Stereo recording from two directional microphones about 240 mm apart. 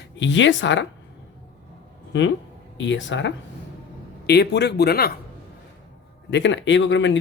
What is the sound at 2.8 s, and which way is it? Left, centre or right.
Speech, left.